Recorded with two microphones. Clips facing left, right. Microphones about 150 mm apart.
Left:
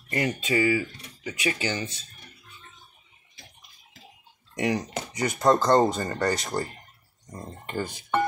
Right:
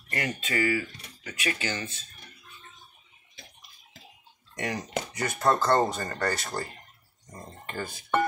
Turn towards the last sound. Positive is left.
turn(degrees=15)  # may be behind; listen again after turning